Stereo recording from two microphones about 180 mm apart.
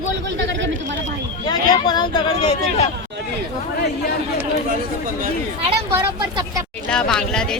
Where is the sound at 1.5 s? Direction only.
25° left (ahead or behind).